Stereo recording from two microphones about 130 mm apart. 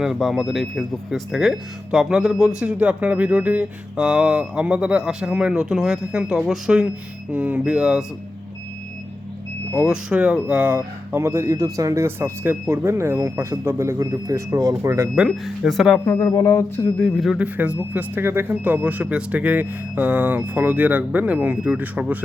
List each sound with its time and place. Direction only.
0.0 s speech: centre (ahead or behind)
9.7 s speech: 10° right (ahead or behind)
15.1 s speech: centre (ahead or behind)
16.0 s speech: 15° left (ahead or behind)
17.3 s speech: 10° right (ahead or behind)